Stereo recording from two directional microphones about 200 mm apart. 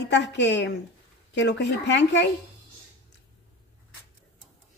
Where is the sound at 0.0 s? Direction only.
60° left (ahead or behind).